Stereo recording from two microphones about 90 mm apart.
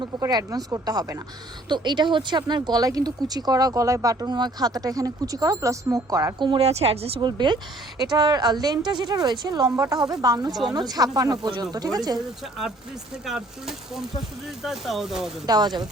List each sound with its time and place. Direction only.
0.3 s speech: 45° right (ahead or behind)
1.7 s speech: 55° right (ahead or behind); by 6.3 s 40° right (ahead or behind)
6.4 s a woman's voice: 75° right (ahead or behind)
7.3 s speech: 55° right (ahead or behind)
13.2 s speech: 5° right (ahead or behind)
15.4 s speech: 50° right (ahead or behind)